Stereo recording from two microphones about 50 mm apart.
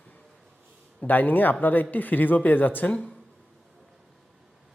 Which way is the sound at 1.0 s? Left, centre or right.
Left.